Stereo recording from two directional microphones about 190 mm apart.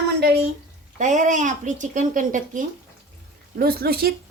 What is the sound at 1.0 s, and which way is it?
Speech, 40° right (ahead or behind).